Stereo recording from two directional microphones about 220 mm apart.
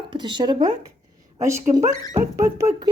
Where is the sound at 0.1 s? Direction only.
20° right (ahead or behind).